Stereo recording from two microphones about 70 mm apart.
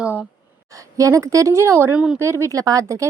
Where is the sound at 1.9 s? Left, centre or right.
Centre.